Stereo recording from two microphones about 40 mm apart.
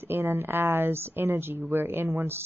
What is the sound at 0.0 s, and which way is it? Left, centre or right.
Speech, right.